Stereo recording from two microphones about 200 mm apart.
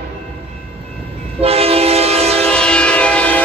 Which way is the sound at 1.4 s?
30° right (ahead or behind).